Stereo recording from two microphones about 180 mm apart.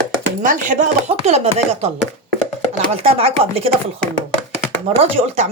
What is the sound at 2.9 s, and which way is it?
Speech, 35° right (ahead or behind).